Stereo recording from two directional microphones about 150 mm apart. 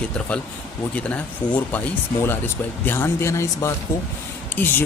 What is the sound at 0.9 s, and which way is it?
Speech, 10° left (ahead or behind).